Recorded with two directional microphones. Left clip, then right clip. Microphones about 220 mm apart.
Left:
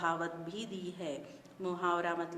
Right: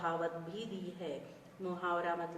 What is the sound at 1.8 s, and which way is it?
Speech, 50° left (ahead or behind).